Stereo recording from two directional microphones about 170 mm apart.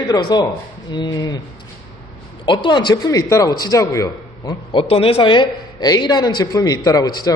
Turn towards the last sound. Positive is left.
turn(degrees=25)  # may be behind; listen again after turning